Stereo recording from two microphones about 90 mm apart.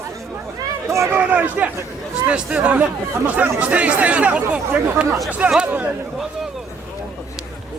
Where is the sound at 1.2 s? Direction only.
15° right (ahead or behind).